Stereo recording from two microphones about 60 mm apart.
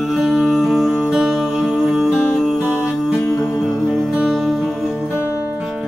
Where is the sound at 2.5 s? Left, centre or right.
Right.